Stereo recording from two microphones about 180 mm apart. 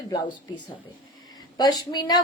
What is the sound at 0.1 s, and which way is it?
Speech, 25° left (ahead or behind).